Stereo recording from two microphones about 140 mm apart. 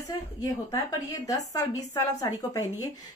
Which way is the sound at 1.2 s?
25° left (ahead or behind).